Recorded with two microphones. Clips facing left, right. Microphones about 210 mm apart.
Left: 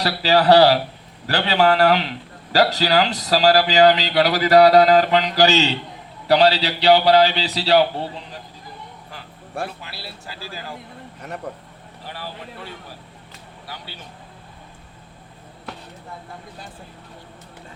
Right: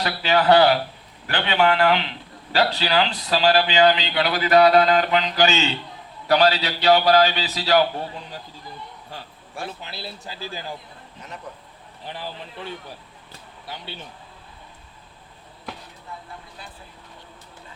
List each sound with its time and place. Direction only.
0.0 s a man's voice: 35° left (ahead or behind)
9.8 s speech: 20° right (ahead or behind)
13.7 s speech: 20° right (ahead or behind)